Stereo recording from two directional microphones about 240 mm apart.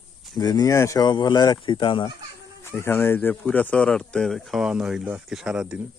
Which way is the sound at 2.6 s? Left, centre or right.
Centre.